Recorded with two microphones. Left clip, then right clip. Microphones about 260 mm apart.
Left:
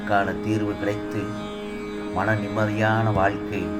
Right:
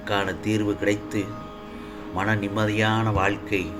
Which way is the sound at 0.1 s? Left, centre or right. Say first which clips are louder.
Left 2 dB; right.